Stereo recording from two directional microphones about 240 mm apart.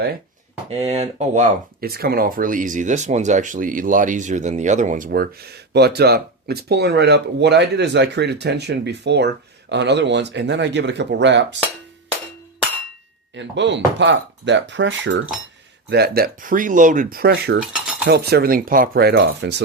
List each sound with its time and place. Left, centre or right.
0.7 s speech: right
13.3 s speech: right